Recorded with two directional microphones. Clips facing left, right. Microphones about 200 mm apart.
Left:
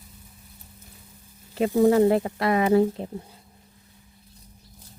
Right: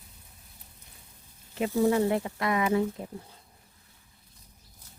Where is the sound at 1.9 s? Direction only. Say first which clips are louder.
Left 6 dB; 40° left (ahead or behind).